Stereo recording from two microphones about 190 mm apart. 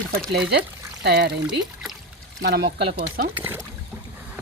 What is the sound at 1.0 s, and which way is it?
Speech, 60° right (ahead or behind).